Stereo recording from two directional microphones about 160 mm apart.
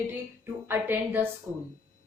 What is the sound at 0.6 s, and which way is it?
Speech, 10° right (ahead or behind).